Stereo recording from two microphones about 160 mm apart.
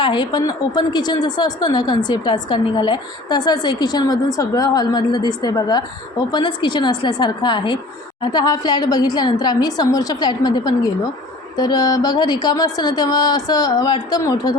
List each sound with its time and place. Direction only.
0.0 s a woman's voice: 30° left (ahead or behind)